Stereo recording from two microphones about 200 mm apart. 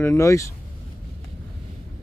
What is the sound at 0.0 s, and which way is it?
Speech, 15° left (ahead or behind).